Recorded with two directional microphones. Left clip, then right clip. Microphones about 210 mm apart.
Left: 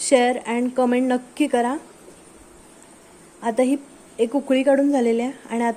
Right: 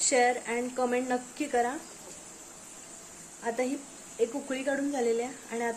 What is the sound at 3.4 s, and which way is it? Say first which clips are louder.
A woman's voice: left 11 dB; 40° left (ahead or behind).